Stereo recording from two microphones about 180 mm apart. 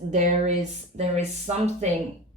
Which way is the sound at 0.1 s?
45° right (ahead or behind).